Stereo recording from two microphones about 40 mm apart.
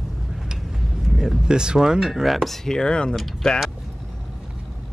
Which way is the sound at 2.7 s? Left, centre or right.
Centre.